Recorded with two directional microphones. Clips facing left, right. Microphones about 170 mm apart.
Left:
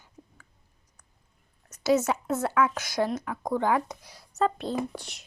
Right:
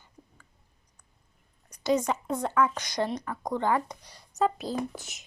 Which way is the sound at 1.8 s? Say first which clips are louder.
Left 2 dB; 5° left (ahead or behind).